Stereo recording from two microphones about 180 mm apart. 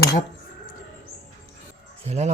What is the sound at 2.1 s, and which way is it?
Speech, 35° right (ahead or behind).